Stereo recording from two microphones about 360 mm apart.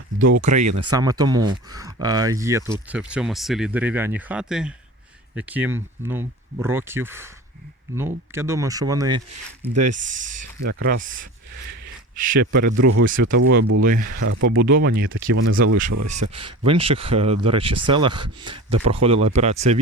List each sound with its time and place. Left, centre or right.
0.6 s speech: right
0.9 s speech: centre
12.4 s speech: right
13.9 s speech: right
14.5 s speech: right